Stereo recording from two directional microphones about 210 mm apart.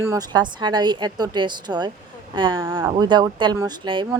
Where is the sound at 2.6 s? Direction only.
10° right (ahead or behind).